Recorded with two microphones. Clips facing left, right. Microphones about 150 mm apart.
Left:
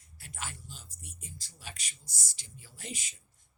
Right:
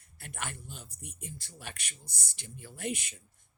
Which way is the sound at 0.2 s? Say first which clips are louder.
Right 3 dB; 55° right (ahead or behind).